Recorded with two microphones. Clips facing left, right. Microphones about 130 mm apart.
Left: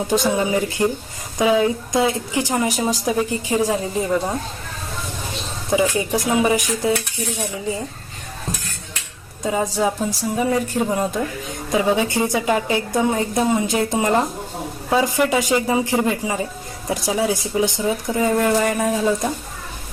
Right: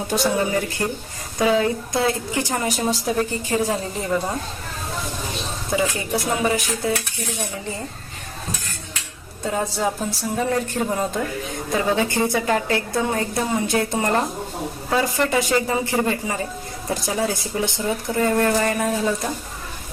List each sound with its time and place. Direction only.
0.1 s a woman's voice: 20° left (ahead or behind)
5.7 s a woman's voice: 20° left (ahead or behind)
9.4 s a woman's voice: 10° left (ahead or behind)